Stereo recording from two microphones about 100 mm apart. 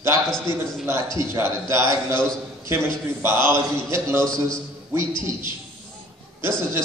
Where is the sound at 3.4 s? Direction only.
25° right (ahead or behind).